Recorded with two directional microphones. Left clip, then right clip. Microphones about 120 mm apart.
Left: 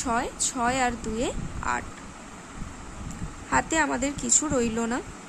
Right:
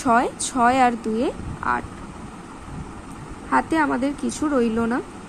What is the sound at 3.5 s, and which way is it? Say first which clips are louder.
Speech: right 4 dB; 15° right (ahead or behind).